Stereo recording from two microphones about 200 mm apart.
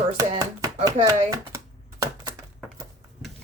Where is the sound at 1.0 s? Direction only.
15° right (ahead or behind).